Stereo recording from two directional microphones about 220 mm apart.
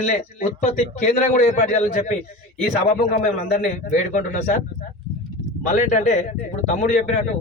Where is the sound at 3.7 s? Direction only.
35° left (ahead or behind).